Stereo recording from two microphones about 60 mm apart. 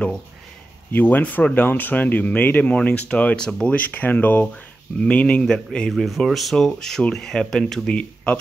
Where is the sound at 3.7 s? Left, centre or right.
Left.